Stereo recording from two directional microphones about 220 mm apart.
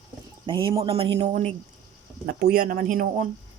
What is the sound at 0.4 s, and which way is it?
Speech, 20° right (ahead or behind).